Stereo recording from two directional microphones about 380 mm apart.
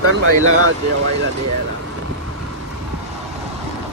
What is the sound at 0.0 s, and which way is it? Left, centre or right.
Speech, right.